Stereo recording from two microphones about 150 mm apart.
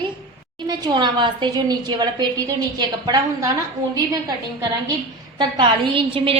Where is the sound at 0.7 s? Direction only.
30° right (ahead or behind).